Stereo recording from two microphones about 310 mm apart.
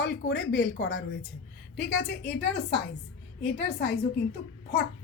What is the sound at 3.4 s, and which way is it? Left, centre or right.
Speech, left.